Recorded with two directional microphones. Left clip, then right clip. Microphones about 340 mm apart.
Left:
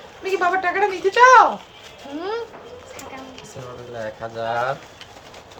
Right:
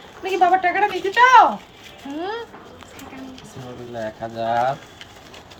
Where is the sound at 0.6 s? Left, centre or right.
Centre.